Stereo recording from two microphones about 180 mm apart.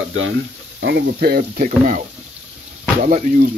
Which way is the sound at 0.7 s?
70° right (ahead or behind).